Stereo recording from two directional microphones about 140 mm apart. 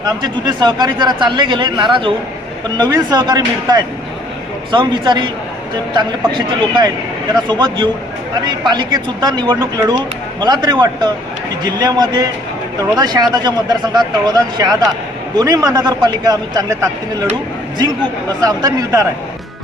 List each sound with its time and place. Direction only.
0.0 s a man's voice: 30° right (ahead or behind)
7.4 s a man's voice: 30° right (ahead or behind)
18.3 s a man's voice: 25° right (ahead or behind)